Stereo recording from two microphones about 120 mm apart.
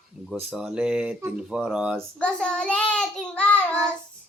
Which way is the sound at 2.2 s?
10° left (ahead or behind).